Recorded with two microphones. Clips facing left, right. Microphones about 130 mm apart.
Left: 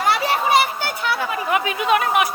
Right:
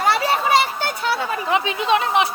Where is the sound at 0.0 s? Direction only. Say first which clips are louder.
Right 1 dB; 30° right (ahead or behind).